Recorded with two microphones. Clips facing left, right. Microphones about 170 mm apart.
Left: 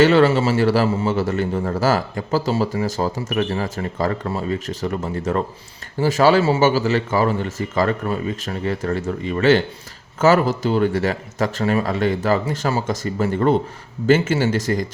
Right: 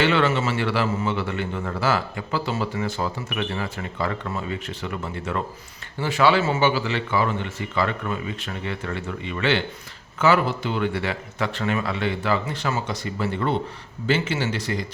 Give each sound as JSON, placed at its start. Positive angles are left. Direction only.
{"t": 0.0, "sound": "a man's voice", "side_deg": 40}